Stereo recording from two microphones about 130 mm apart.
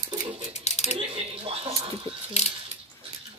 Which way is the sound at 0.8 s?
50° right (ahead or behind).